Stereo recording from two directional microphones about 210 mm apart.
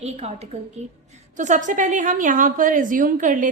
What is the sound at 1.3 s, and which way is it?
A woman's voice, 35° right (ahead or behind).